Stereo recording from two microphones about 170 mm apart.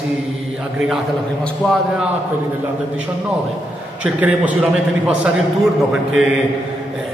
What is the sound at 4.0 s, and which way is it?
A man's voice, 10° right (ahead or behind).